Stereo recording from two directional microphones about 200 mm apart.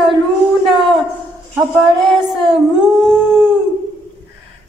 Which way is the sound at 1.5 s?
Centre (ahead or behind).